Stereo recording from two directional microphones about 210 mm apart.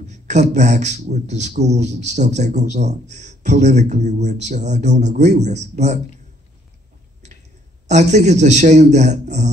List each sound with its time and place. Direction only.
0.0 s a man's voice: 35° right (ahead or behind)
7.9 s a man's voice: 35° right (ahead or behind)